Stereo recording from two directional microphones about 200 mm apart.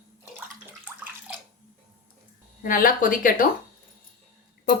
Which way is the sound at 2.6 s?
45° left (ahead or behind).